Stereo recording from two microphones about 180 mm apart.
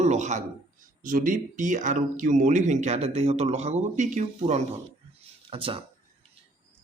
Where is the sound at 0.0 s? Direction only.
40° right (ahead or behind).